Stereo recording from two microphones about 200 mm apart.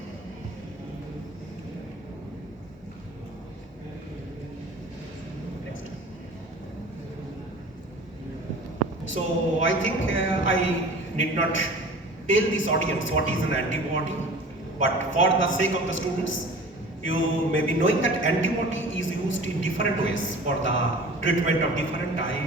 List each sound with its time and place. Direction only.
9.1 s a man's voice: 70° left (ahead or behind)